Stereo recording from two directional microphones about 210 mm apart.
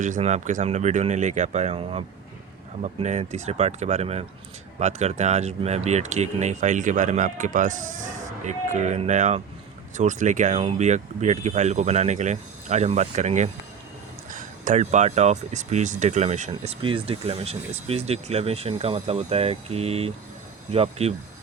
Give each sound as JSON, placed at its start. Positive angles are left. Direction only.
{"t": 0.0, "sound": "speech", "side_deg": -35}